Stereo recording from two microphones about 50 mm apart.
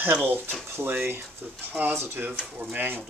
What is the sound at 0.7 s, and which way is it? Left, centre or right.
Speech, right.